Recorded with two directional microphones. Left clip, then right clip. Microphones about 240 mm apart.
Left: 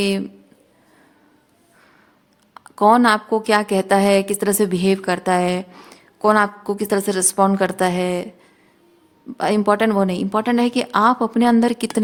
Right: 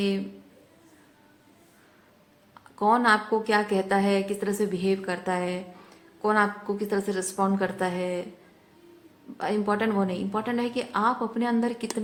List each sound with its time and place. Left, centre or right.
2.6 s a woman's voice: left
9.4 s a woman's voice: left